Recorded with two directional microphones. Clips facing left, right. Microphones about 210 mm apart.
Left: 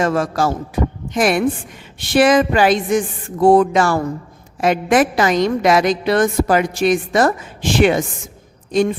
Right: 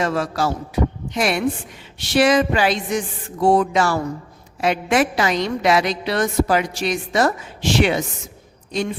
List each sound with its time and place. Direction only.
0.0 s a woman's voice: 50° left (ahead or behind)